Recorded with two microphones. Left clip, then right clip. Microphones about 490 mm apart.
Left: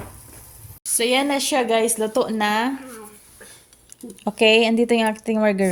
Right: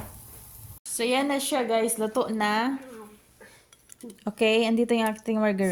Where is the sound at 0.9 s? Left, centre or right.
Right.